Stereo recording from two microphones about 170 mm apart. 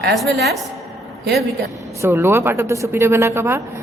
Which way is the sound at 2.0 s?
15° right (ahead or behind).